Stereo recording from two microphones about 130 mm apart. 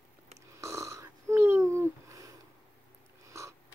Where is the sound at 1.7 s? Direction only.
25° right (ahead or behind).